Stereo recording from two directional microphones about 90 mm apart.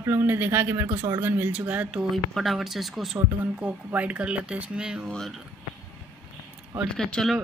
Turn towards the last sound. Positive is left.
turn(degrees=5)  # may be behind; listen again after turning